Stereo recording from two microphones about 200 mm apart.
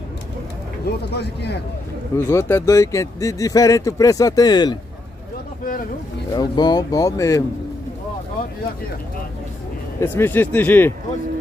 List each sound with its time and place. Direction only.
1.1 s speech: 55° left (ahead or behind)
2.1 s speech: 10° left (ahead or behind)
6.3 s speech: 20° left (ahead or behind)
9.9 s speech: 10° left (ahead or behind)